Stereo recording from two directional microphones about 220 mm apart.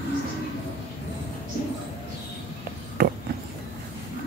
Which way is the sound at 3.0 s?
45° right (ahead or behind).